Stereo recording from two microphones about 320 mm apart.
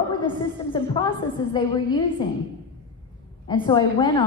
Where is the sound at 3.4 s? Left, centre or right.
Centre.